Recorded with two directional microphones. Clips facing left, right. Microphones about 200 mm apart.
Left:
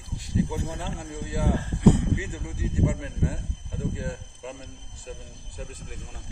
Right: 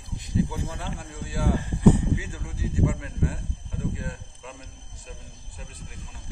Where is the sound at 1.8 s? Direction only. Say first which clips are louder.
Right 1 dB; 70° left (ahead or behind).